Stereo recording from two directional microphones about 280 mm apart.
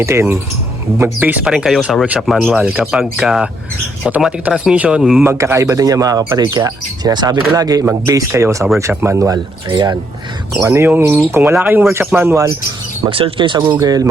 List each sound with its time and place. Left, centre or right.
0.0 s speech: centre